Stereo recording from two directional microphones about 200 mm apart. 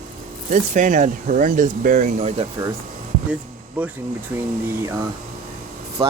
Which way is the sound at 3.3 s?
10° right (ahead or behind).